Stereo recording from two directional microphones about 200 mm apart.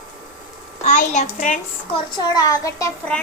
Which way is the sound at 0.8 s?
40° left (ahead or behind).